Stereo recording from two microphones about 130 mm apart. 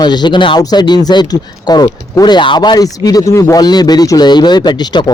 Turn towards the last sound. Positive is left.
turn(degrees=35)  # may be behind; listen again after turning